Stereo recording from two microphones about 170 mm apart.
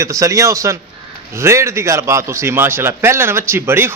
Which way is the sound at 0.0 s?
20° right (ahead or behind).